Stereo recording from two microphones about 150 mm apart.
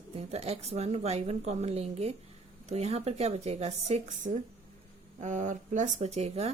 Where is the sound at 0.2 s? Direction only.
45° right (ahead or behind).